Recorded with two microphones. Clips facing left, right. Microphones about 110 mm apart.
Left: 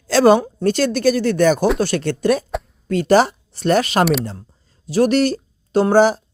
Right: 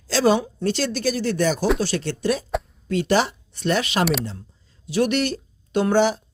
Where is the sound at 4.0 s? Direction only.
Centre (ahead or behind).